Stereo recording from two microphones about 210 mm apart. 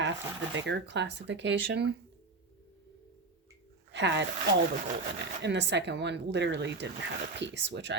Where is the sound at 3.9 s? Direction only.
55° right (ahead or behind).